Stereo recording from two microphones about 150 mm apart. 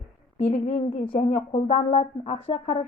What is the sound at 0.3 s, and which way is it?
A woman's voice, 45° left (ahead or behind).